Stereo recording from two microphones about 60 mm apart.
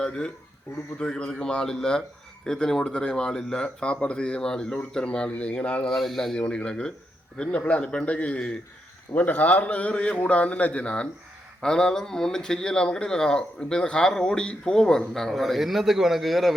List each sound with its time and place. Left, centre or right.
1.0 s speech: centre
5.9 s a man's voice: centre
6.5 s a man's voice: centre